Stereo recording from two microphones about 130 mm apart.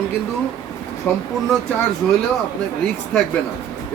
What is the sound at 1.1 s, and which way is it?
Speech, 15° left (ahead or behind).